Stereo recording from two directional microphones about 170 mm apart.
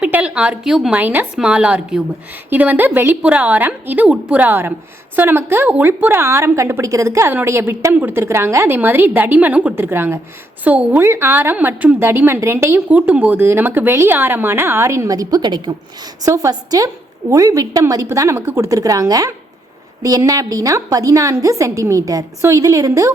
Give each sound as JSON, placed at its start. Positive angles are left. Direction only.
{"t": 0.0, "sound": "a woman's voice", "side_deg": -5}